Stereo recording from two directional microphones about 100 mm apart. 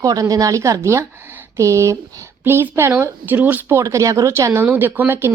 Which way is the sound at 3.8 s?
30° right (ahead or behind).